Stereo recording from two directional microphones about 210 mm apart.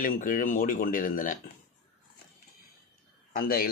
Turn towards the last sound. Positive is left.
turn(degrees=45)  # may be behind; listen again after turning